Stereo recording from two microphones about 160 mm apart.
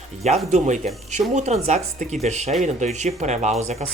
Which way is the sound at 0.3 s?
45° right (ahead or behind).